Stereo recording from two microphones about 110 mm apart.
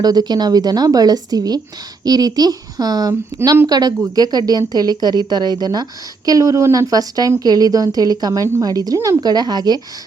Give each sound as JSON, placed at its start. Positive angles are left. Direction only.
{"t": 0.0, "sound": "a woman's voice", "side_deg": -35}